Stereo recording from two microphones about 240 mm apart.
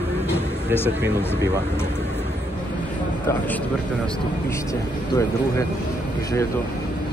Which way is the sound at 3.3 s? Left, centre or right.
Centre.